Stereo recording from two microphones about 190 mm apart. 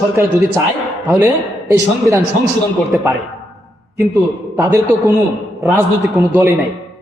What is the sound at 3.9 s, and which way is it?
A man's voice, 15° right (ahead or behind).